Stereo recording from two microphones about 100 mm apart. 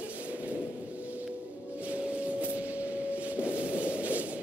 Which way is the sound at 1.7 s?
15° right (ahead or behind).